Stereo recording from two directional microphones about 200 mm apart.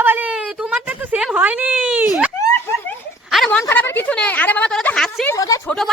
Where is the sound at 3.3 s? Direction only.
5° left (ahead or behind).